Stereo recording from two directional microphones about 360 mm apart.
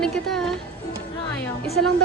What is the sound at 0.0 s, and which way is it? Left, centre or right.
Music, centre.